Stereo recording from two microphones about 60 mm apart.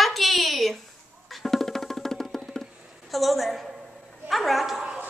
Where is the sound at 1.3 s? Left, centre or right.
Centre.